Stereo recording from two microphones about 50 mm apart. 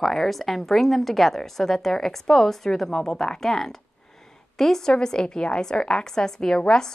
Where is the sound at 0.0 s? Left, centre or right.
Centre.